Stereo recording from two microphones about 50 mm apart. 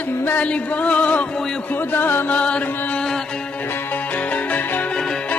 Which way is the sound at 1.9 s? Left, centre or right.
Left.